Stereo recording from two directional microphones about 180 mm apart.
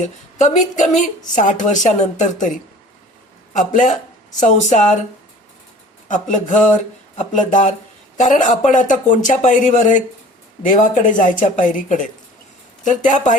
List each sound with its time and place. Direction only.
0.0 s a woman's voice: 40° left (ahead or behind)
3.7 s a woman's voice: 45° left (ahead or behind)
6.1 s speech: 45° left (ahead or behind)